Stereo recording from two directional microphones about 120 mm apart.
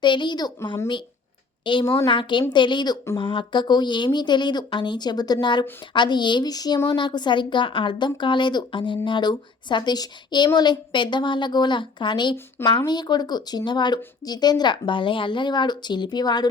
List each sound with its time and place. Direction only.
0.0 s a woman's voice: 40° left (ahead or behind)